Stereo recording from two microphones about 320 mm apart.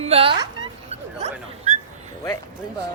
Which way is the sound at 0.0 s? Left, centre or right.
Centre.